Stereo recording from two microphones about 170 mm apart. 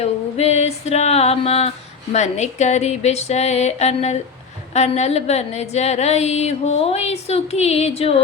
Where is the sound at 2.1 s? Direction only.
40° left (ahead or behind).